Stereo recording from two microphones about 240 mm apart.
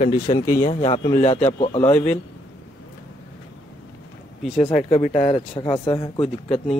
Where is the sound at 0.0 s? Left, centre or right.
Left.